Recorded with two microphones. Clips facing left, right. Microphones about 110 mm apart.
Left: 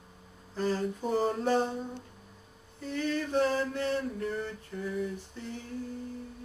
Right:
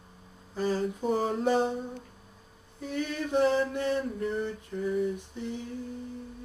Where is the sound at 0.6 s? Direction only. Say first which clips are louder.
Right 2 dB; 10° right (ahead or behind).